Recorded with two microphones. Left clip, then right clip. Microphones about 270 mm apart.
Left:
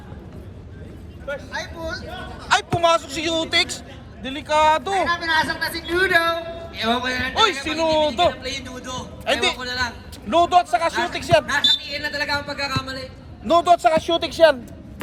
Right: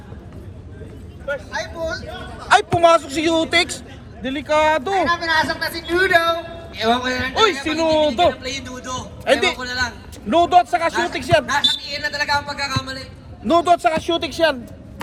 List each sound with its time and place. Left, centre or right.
1.5 s a man's voice: centre
5.0 s a man's voice: centre
7.3 s a man's voice: centre
8.3 s a man's voice: centre
9.2 s a man's voice: centre
9.6 s a man's voice: centre
10.2 s a man's voice: centre
11.4 s a man's voice: centre
13.5 s speech: left